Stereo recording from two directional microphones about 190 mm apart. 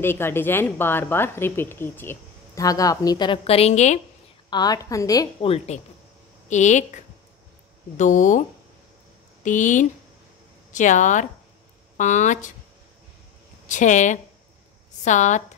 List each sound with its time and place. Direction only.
0.0 s speech: 10° left (ahead or behind); by 4.0 s 35° left (ahead or behind)
4.5 s a woman's voice: 20° left (ahead or behind)
6.5 s speech: 40° left (ahead or behind)
8.0 s speech: 40° left (ahead or behind)
13.7 s speech: 40° left (ahead or behind)